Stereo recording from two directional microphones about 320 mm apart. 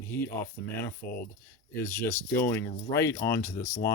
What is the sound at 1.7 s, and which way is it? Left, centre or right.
Speech, centre.